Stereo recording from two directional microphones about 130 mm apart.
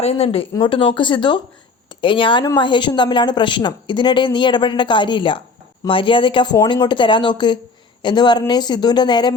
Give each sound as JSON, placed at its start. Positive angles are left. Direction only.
{"t": 0.0, "sound": "speech", "side_deg": 50}